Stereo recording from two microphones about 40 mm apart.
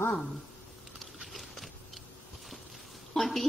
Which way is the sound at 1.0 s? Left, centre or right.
Centre.